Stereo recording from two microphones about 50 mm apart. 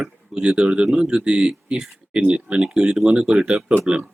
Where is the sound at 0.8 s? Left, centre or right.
Centre.